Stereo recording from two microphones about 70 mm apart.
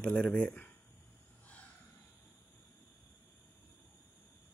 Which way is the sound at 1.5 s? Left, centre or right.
Centre.